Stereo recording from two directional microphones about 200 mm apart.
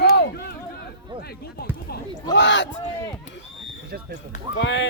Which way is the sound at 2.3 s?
60° left (ahead or behind).